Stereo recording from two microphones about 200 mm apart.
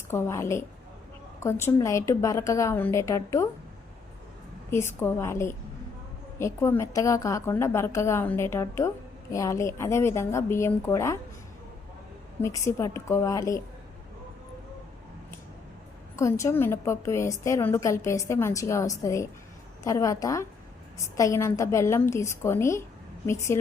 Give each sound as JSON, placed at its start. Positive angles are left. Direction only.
{"t": 0.1, "sound": "a woman's voice", "side_deg": 15}
{"t": 4.7, "sound": "a woman's voice", "side_deg": 10}
{"t": 12.4, "sound": "a woman's voice", "side_deg": 15}
{"t": 16.1, "sound": "a woman's voice", "side_deg": 15}